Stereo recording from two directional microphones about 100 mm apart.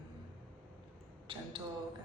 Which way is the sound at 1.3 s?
60° right (ahead or behind).